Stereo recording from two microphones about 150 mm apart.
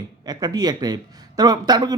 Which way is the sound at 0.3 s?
25° right (ahead or behind).